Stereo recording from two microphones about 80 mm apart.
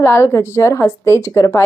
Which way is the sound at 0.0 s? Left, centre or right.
Left.